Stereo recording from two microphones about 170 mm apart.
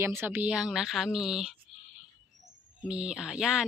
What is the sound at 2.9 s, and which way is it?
Speech, 5° right (ahead or behind).